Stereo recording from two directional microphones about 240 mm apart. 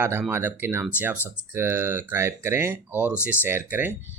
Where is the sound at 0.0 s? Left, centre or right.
Centre.